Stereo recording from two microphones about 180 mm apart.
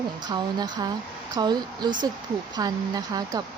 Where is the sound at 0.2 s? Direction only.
20° right (ahead or behind).